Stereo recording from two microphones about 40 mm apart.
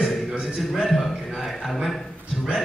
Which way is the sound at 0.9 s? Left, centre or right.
Centre.